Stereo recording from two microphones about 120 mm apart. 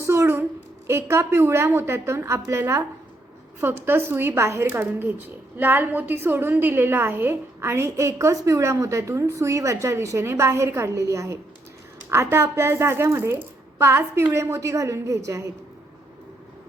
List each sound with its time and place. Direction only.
0.0 s a sound: 25° right (ahead or behind)
0.9 s a woman's voice: 20° right (ahead or behind)
3.8 s a woman's voice: 20° right (ahead or behind)